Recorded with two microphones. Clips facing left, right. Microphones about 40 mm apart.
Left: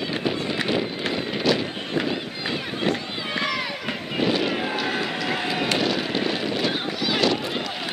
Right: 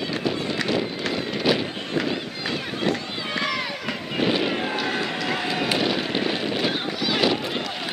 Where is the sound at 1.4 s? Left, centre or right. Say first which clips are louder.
Even; centre.